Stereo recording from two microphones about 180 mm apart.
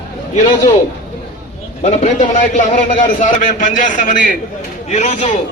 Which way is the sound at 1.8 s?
40° left (ahead or behind).